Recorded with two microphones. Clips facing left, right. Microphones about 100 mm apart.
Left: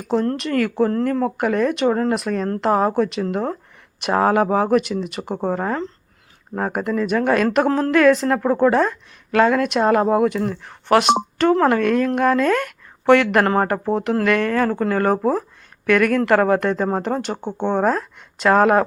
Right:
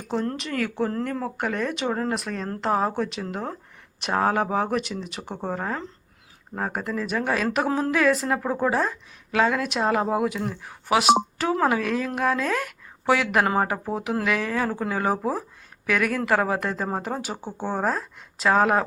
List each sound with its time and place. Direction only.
0.1 s speech: centre (ahead or behind)
5.3 s speech: 35° left (ahead or behind)
5.5 s speech: centre (ahead or behind)